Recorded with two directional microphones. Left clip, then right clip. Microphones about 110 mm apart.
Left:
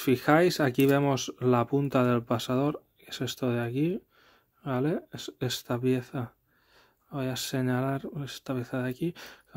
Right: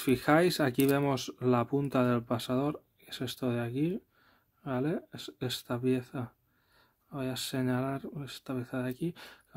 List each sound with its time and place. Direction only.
0.0 s speech: 20° left (ahead or behind)